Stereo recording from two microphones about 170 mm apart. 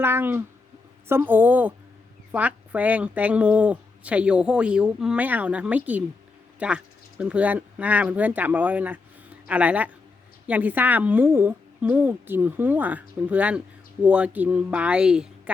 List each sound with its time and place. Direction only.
0.0 s a woman's voice: 15° right (ahead or behind)